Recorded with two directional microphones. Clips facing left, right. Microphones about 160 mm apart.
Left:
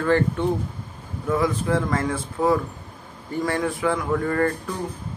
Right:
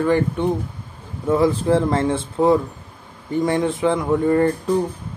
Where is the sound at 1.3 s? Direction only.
30° right (ahead or behind).